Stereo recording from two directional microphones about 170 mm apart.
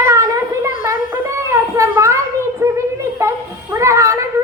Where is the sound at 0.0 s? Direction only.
15° right (ahead or behind).